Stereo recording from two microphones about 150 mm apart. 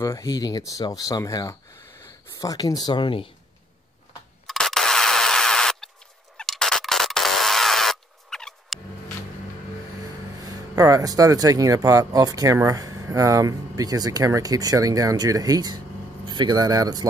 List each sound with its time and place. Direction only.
0.0 s speech: 20° left (ahead or behind)
4.5 s a sound: centre (ahead or behind)
10.4 s speech: 20° right (ahead or behind)